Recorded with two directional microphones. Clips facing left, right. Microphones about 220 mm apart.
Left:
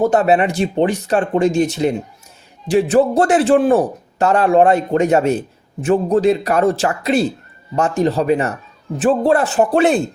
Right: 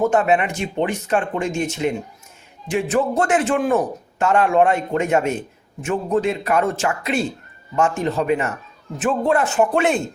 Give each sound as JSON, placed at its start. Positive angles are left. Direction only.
{"t": 0.0, "sound": "a man's voice", "side_deg": 35}